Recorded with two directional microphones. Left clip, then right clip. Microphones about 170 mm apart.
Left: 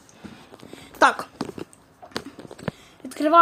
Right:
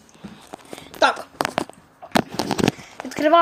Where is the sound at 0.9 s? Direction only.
50° left (ahead or behind).